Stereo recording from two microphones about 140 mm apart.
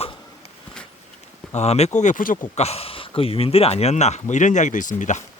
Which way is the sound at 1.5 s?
50° left (ahead or behind).